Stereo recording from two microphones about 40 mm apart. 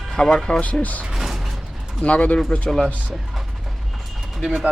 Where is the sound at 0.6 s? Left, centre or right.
Left.